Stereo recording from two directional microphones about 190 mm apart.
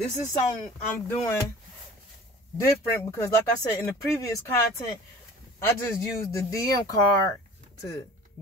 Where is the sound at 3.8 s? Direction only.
15° left (ahead or behind).